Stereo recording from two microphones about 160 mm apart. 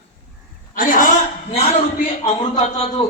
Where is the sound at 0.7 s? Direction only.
60° left (ahead or behind).